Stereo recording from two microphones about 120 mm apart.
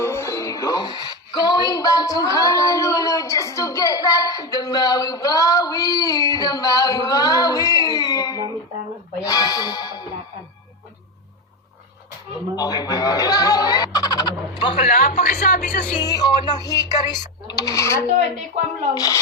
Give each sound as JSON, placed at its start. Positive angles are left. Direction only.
{"t": 0.0, "sound": "speech", "side_deg": 20}
{"t": 9.2, "sound": "music", "side_deg": 30}
{"t": 12.5, "sound": "speech", "side_deg": 35}
{"t": 14.8, "sound": "a woman's voice", "side_deg": 80}
{"t": 16.0, "sound": "speech", "side_deg": 35}